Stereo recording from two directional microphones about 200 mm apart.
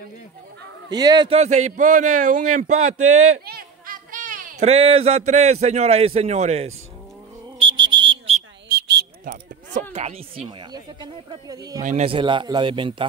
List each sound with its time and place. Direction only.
0.8 s speech: 20° right (ahead or behind)
1.4 s speech: 35° right (ahead or behind)
3.4 s speech: 45° right (ahead or behind)
7.5 s music: 25° right (ahead or behind)
7.9 s a sound: 25° right (ahead or behind)
8.6 s a sound: 50° right (ahead or behind)
9.9 s speech: 30° right (ahead or behind)
11.8 s speech: 35° right (ahead or behind)